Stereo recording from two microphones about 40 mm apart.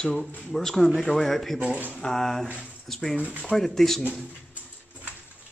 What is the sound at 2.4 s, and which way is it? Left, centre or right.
Speech, right.